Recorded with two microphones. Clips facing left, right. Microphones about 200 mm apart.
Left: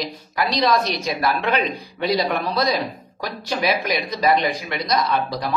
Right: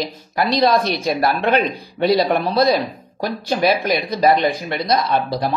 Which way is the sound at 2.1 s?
35° right (ahead or behind).